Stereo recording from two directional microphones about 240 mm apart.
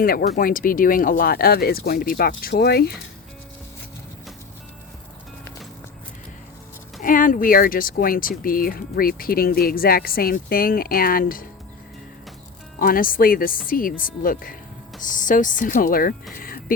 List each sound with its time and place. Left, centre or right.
0.0 s speech: left
7.0 s speech: left
12.8 s speech: left
16.3 s music: left